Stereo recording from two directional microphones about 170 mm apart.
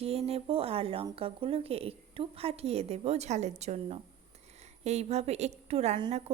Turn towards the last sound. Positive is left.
turn(degrees=-40)  # may be behind; listen again after turning